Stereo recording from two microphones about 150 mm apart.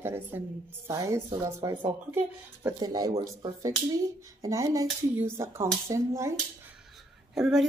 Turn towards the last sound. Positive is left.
turn(degrees=0)  # may be behind; listen again after turning